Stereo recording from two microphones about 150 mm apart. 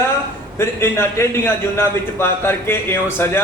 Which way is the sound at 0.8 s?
20° left (ahead or behind).